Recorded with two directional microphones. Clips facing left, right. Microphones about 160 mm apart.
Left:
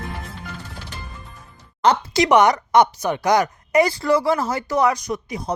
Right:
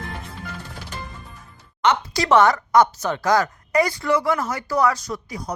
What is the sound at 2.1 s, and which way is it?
Speech, 20° left (ahead or behind).